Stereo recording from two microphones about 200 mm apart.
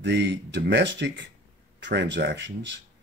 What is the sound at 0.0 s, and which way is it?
Speech, 60° right (ahead or behind).